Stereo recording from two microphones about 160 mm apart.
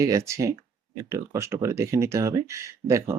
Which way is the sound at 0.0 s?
20° right (ahead or behind).